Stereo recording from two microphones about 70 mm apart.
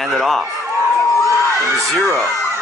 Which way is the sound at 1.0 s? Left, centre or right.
Left.